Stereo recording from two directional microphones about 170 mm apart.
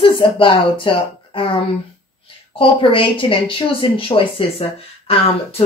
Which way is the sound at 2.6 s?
30° left (ahead or behind).